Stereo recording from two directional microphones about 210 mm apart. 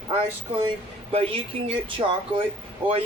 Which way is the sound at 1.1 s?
25° right (ahead or behind).